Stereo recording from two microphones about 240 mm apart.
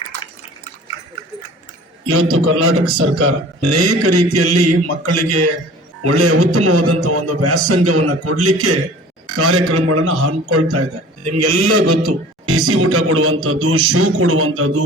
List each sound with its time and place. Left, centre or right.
2.0 s a man's voice: right